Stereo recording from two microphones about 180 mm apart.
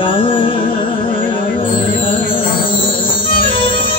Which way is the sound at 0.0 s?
30° left (ahead or behind).